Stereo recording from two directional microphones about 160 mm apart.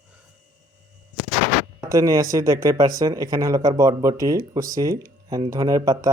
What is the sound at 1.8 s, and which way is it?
Speech, 20° right (ahead or behind).